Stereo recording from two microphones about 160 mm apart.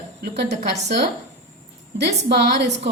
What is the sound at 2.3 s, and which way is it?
Speech, 90° right.